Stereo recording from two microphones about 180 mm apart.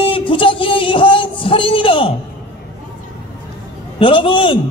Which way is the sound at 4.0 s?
30° left (ahead or behind).